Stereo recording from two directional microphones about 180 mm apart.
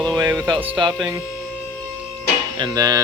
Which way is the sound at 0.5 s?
10° right (ahead or behind).